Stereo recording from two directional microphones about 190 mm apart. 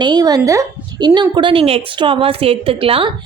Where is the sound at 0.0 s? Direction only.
20° right (ahead or behind).